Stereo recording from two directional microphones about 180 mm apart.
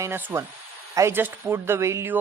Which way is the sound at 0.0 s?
10° right (ahead or behind).